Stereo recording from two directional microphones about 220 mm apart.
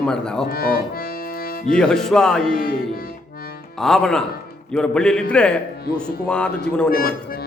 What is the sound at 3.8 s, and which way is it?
A man's voice, centre (ahead or behind).